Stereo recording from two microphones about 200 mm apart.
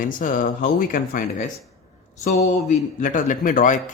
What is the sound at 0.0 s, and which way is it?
Speech, 45° left (ahead or behind).